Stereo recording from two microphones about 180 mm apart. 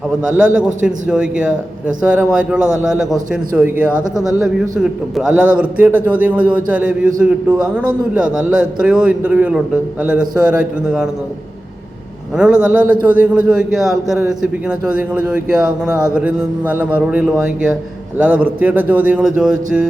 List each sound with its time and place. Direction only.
0.3 s a man's voice: 5° right (ahead or behind)
12.4 s a man's voice: 5° right (ahead or behind)